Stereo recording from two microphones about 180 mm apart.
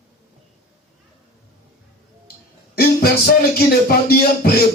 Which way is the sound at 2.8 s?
60° left (ahead or behind).